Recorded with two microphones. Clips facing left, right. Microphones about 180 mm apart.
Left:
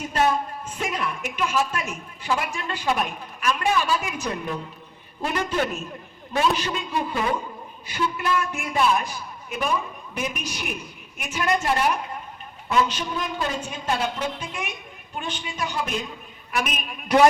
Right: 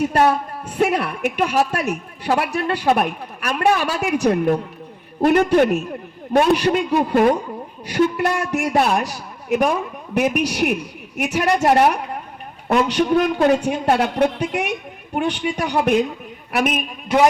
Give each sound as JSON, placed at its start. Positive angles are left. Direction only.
{"t": 0.0, "sound": "a woman's voice", "side_deg": -65}
{"t": 7.9, "sound": "a woman's voice", "side_deg": -75}